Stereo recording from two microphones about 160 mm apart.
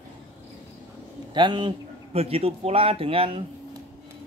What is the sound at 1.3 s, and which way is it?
A man's voice, 30° right (ahead or behind).